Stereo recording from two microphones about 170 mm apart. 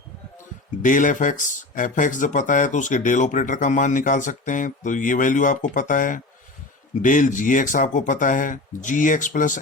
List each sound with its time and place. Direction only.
0.8 s speech: 50° left (ahead or behind)